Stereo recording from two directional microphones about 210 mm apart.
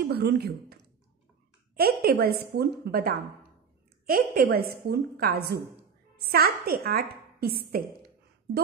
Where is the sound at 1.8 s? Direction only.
50° right (ahead or behind).